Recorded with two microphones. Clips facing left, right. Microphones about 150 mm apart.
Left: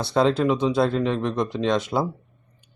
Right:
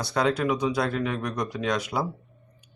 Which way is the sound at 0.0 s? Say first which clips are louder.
Left 5 dB; 25° left (ahead or behind).